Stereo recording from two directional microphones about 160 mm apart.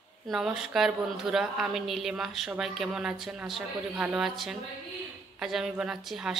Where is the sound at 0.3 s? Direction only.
Centre (ahead or behind).